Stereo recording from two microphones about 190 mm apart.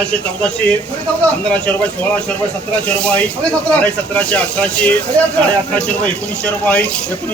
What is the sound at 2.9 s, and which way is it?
Speech, 5° left (ahead or behind).